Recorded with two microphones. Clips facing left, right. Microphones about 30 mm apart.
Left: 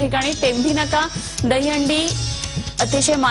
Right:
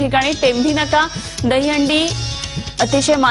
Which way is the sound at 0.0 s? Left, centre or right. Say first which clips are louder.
Right 4 dB; centre.